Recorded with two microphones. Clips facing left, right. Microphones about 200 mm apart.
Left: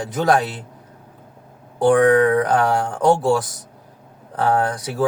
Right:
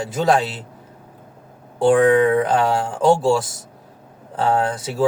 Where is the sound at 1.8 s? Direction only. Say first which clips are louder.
Even; 25° right (ahead or behind).